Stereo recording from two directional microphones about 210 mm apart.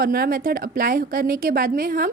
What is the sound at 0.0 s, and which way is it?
A woman's voice, 45° right (ahead or behind).